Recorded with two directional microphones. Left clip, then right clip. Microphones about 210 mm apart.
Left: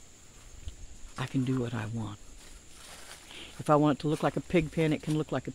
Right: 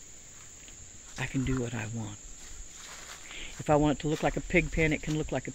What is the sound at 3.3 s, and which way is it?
Speech, 15° left (ahead or behind).